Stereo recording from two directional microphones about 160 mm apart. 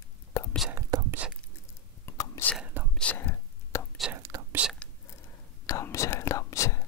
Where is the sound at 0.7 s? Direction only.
20° right (ahead or behind).